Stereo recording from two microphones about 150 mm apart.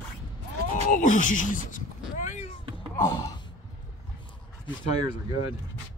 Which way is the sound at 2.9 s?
15° left (ahead or behind).